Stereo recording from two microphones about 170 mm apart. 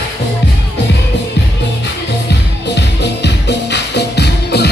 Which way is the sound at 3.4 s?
90° left.